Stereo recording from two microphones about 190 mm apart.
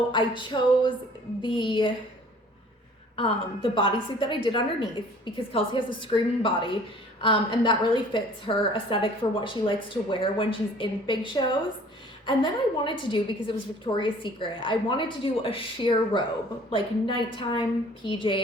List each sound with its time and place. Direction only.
0.1 s a woman's voice: 25° left (ahead or behind)
3.2 s a woman's voice: 30° left (ahead or behind)